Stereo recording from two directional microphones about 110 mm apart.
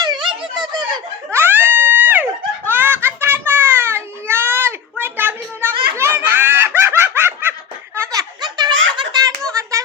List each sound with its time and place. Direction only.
0.0 s a sound: 40° right (ahead or behind)
0.7 s snicker: 40° right (ahead or behind)
1.3 s a sound: 20° right (ahead or behind)
2.6 s baby cry: 20° right (ahead or behind)
6.0 s laughter: 20° right (ahead or behind)
7.9 s giggle: 20° right (ahead or behind)
8.2 s giggle: 40° right (ahead or behind)